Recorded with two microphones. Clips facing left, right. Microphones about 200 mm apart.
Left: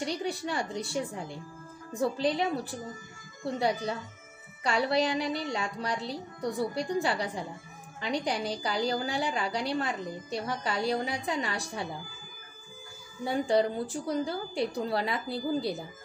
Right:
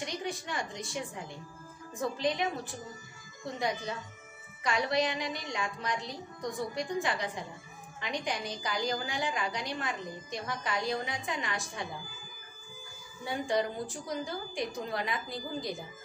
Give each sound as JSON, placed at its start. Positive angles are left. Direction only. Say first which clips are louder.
{"t": 0.0, "sound": "a woman's voice", "louder": "left 5 dB", "side_deg": 35}
{"t": 2.0, "sound": "a woman's voice", "louder": "left 4 dB", "side_deg": 35}
{"t": 13.2, "sound": "a woman's voice", "louder": "left 5 dB", "side_deg": 35}